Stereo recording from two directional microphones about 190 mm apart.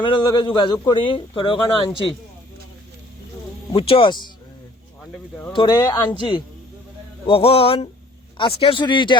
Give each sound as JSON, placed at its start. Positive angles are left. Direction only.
{"t": 0.0, "sound": "a man's voice", "side_deg": 25}
{"t": 3.7, "sound": "a man's voice", "side_deg": 30}
{"t": 5.5, "sound": "a man's voice", "side_deg": 20}